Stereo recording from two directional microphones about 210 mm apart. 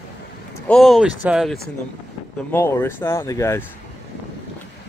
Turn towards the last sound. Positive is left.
turn(degrees=15)  # may be behind; listen again after turning